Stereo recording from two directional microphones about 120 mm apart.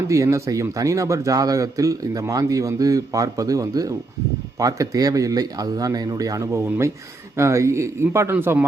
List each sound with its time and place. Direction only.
0.1 s speech: 25° right (ahead or behind)